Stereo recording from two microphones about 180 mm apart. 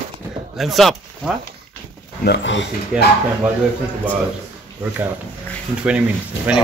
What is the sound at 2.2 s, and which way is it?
Speech, 80° left.